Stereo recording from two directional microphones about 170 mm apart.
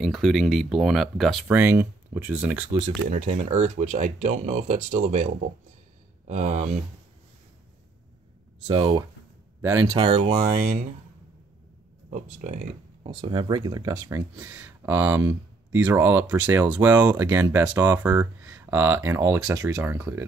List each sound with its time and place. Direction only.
0.0 s speech: centre (ahead or behind)
3.1 s speech: 45° right (ahead or behind)
8.6 s speech: 30° right (ahead or behind)
9.6 s speech: 15° right (ahead or behind)
9.9 s speech: 35° right (ahead or behind)
12.1 s speech: 45° right (ahead or behind)
13.0 s speech: 30° right (ahead or behind)